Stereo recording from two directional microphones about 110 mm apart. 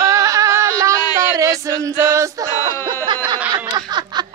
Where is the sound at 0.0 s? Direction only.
30° right (ahead or behind).